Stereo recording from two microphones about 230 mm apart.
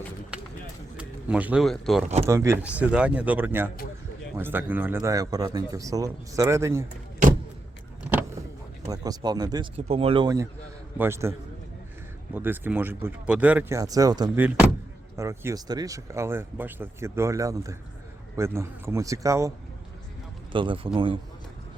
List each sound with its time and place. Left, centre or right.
0.9 s speech: centre
2.2 s speech: centre
8.9 s speech: centre